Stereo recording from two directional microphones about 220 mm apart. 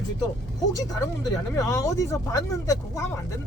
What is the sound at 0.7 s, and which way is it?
Speech, 15° left (ahead or behind).